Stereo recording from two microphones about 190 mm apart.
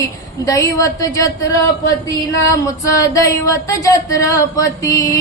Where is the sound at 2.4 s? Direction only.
15° left (ahead or behind).